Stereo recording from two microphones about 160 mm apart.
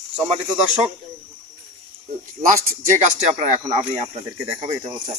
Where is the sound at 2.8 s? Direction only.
50° right (ahead or behind).